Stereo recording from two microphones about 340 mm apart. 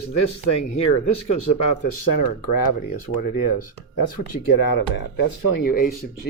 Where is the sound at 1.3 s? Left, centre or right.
Left.